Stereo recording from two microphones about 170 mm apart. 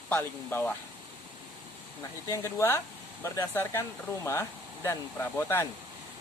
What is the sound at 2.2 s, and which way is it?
Speech, 15° left (ahead or behind).